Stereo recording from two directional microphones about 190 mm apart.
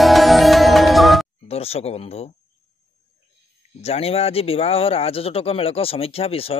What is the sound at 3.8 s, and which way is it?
Speech, 30° left (ahead or behind).